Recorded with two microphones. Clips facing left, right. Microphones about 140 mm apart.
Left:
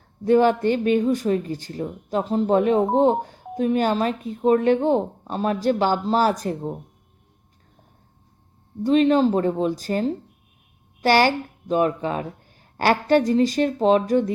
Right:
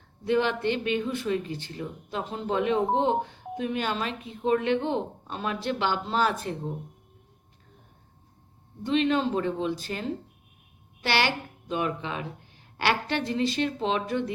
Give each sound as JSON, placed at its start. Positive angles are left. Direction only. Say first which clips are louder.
{"t": 0.3, "sound": "speech", "louder": "left 8 dB", "side_deg": 45}
{"t": 8.8, "sound": "speech", "louder": "left 7 dB", "side_deg": 40}